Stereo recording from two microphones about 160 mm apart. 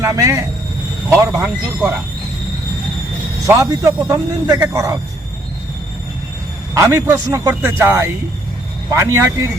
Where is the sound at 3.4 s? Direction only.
20° right (ahead or behind).